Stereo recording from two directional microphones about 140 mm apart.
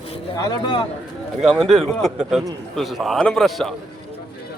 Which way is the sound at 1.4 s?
Centre (ahead or behind).